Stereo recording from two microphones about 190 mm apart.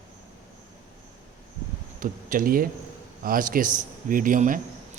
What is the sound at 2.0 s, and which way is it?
A man's voice, 45° right (ahead or behind).